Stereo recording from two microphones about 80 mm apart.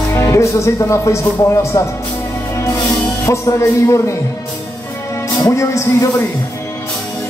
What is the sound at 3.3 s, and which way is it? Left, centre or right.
Speech, left.